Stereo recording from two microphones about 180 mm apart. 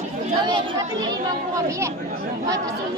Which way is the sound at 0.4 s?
25° right (ahead or behind).